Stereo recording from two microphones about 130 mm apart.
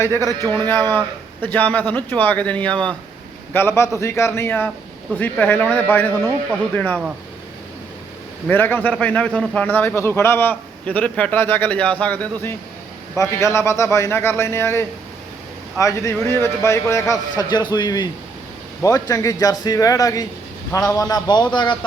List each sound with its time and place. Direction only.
0.2 s a man's voice: 30° right (ahead or behind)
0.5 s a man's voice: 15° left (ahead or behind)
8.4 s a man's voice: 15° left (ahead or behind); by 21.8 s 35° left (ahead or behind)